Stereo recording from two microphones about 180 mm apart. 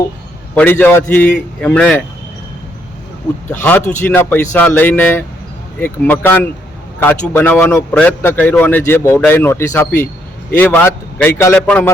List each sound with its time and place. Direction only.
0.5 s speech: 10° left (ahead or behind)
3.5 s speech: 10° left (ahead or behind)